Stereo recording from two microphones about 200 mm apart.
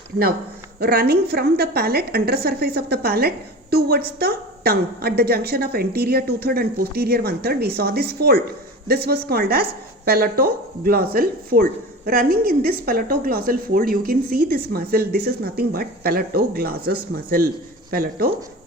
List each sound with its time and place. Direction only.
0.8 s a woman's voice: 50° right (ahead or behind)